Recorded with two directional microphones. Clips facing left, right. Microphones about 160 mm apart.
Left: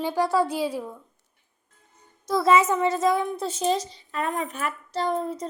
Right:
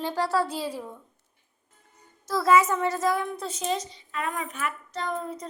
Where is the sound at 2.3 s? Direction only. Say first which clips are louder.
Left 2 dB; 20° left (ahead or behind).